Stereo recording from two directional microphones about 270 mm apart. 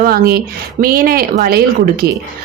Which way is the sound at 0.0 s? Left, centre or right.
Right.